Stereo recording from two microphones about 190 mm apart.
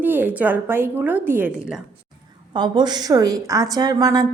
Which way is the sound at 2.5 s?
25° right (ahead or behind).